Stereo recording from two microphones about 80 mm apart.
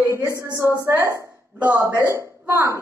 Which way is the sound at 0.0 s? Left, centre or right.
Right.